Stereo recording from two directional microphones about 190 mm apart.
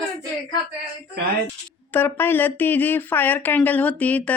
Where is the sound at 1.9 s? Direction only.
10° left (ahead or behind).